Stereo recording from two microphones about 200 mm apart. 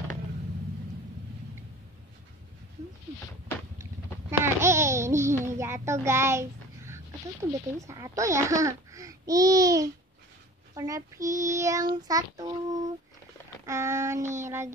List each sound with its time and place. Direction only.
4.3 s babbling: 15° right (ahead or behind)
5.4 s a child's voice: 15° right (ahead or behind)
7.5 s speech: 15° right (ahead or behind)